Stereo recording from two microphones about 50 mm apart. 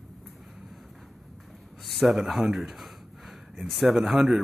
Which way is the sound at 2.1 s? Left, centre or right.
Centre.